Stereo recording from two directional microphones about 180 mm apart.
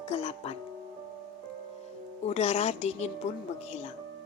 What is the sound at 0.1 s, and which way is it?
Speech, 35° left (ahead or behind).